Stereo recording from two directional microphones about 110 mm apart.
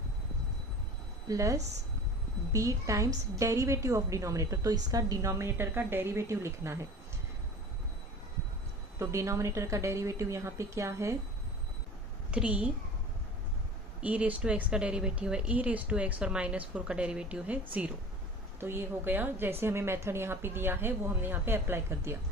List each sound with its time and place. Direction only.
1.3 s a woman's voice: 30° right (ahead or behind)
9.0 s a woman's voice: 25° right (ahead or behind)
12.3 s speech: 10° right (ahead or behind)
14.0 s a woman's voice: 15° right (ahead or behind)